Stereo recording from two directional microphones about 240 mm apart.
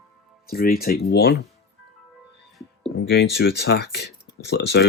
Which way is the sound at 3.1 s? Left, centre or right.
Left.